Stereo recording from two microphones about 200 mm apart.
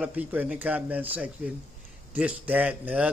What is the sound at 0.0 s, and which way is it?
A man's voice, 10° right (ahead or behind).